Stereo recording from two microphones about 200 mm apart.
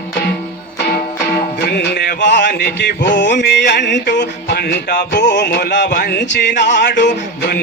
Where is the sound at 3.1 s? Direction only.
60° left (ahead or behind).